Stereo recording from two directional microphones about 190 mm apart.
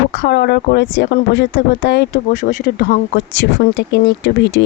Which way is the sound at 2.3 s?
40° left (ahead or behind).